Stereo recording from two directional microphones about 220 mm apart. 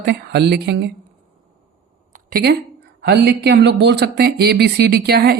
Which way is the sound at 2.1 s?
40° right (ahead or behind).